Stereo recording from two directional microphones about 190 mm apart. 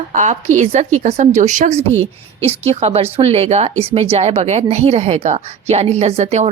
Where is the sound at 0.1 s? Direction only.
40° right (ahead or behind).